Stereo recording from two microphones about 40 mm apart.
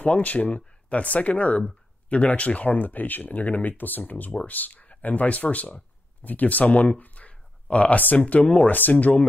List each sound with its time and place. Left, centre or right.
0.0 s speech: left
7.0 s a sound: left
7.6 s speech: left